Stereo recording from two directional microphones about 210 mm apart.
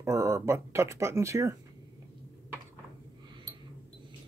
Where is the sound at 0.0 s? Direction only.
15° right (ahead or behind).